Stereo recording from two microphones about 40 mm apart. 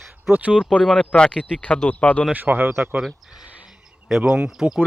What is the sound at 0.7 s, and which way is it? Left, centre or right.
Speech, left.